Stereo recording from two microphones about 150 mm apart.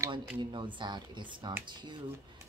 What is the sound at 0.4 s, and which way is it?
Speech, 30° right (ahead or behind).